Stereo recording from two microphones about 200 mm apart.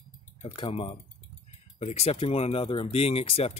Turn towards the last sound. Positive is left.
turn(degrees=30)  # may be behind; listen again after turning